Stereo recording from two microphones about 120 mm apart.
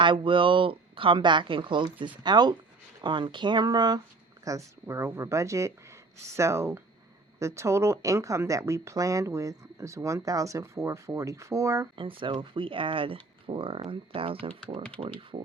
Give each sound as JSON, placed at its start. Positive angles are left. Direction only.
{"t": 0.0, "sound": "speech", "side_deg": -45}
{"t": 11.9, "sound": "speech", "side_deg": -45}